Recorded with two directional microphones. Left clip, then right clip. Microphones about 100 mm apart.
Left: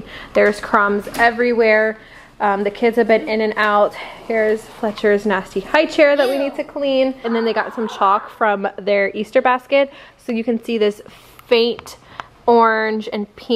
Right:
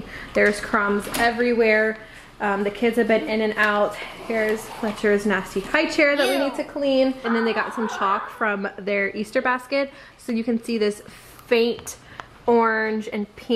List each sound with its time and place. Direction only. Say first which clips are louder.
0.1 s a woman's voice: left 5 dB; 15° left (ahead or behind)
1.8 s a sound: left 4 dB; 15° right (ahead or behind)
2.4 s a woman's voice: left 6 dB; 15° left (ahead or behind)
6.4 s a woman's voice: left 3 dB; 20° right (ahead or behind)
7.2 s a woman's voice: left 4 dB; 15° left (ahead or behind)